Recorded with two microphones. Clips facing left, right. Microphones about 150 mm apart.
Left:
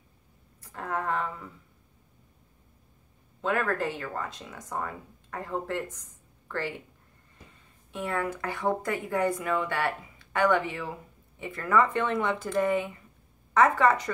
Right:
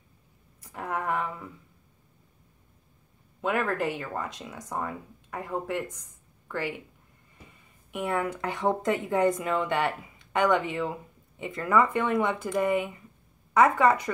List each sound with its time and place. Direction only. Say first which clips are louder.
0.6 s a sound: even; 15° right (ahead or behind)
3.3 s speech: right 1 dB; 15° right (ahead or behind)
7.9 s speech: right 2 dB; 15° right (ahead or behind)